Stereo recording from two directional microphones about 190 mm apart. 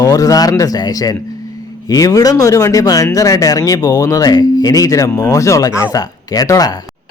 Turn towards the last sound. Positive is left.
turn(degrees=20)  # may be behind; listen again after turning